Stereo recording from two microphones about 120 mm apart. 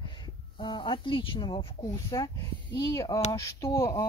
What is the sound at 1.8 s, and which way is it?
Speech, 30° left (ahead or behind).